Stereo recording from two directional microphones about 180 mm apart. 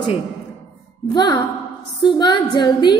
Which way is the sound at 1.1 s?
25° left (ahead or behind).